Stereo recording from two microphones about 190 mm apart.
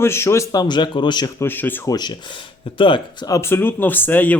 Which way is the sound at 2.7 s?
25° left (ahead or behind).